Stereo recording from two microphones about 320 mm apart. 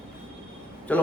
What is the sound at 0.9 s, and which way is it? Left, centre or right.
Speech, centre.